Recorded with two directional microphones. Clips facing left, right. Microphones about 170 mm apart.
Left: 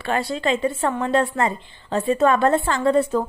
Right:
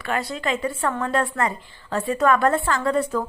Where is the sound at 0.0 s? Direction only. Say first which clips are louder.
Left 3 dB; 30° left (ahead or behind).